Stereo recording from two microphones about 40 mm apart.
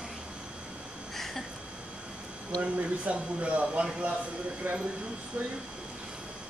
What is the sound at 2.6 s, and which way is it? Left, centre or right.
Speech, right.